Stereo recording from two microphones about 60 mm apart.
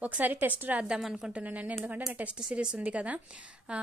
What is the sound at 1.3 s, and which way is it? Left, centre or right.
A woman's voice, right.